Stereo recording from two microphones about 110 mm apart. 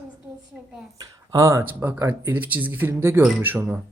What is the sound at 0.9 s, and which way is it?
Speech, 35° right (ahead or behind).